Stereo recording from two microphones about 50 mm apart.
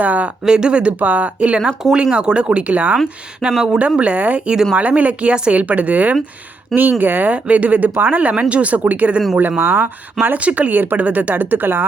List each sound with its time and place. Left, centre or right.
0.0 s speech: right
0.4 s speech: centre
0.9 s speech: right
7.3 s speech: right
9.6 s speech: right
10.2 s speech: right